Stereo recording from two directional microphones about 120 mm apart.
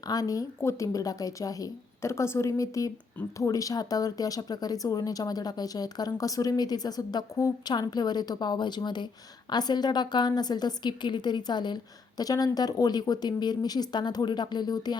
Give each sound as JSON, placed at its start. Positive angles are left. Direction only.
{"t": 0.1, "sound": "a woman's voice", "side_deg": 30}